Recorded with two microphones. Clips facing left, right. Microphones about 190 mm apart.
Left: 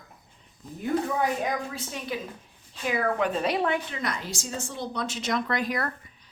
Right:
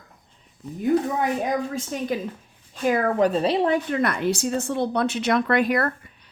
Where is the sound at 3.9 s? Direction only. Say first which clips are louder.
Right 10 dB; 55° right (ahead or behind).